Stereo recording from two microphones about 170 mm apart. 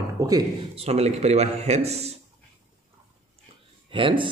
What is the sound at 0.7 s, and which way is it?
A man's voice, 35° right (ahead or behind).